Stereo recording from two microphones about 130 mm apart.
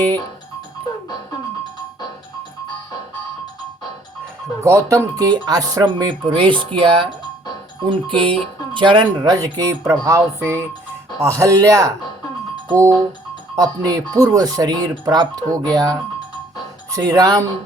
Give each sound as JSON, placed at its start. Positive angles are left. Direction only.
{"t": 4.6, "sound": "speech", "side_deg": -20}